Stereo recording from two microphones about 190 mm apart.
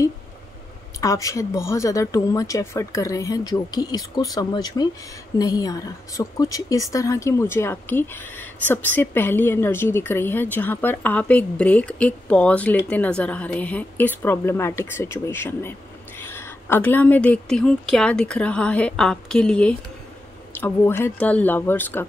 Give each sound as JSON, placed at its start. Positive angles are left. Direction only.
{"t": 1.0, "sound": "a woman's voice", "side_deg": 15}